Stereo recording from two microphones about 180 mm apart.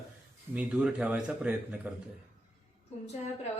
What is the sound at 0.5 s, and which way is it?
Speech, 5° right (ahead or behind).